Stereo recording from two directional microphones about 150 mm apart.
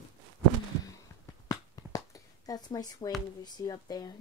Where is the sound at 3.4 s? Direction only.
25° left (ahead or behind).